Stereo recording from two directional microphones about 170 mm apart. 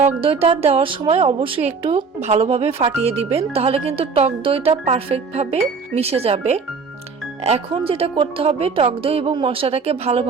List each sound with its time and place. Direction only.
0.0 s speech: 35° right (ahead or behind)